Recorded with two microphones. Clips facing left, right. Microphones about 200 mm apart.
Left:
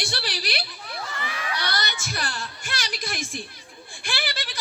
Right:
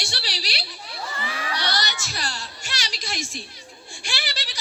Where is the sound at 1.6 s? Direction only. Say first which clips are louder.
Right 2 dB; 55° left (ahead or behind).